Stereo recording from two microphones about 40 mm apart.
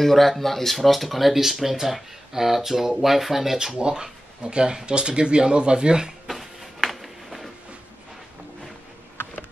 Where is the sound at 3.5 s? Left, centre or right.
Centre.